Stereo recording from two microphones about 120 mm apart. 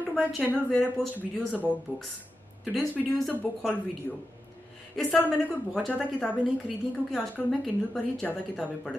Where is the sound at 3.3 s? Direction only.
10° left (ahead or behind).